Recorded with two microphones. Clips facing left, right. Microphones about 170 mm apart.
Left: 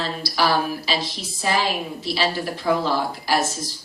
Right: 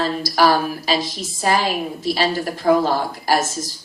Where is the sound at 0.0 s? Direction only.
45° right (ahead or behind).